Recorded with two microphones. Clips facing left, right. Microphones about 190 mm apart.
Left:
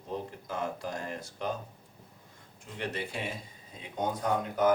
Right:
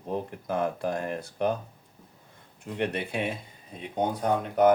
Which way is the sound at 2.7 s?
60° right (ahead or behind).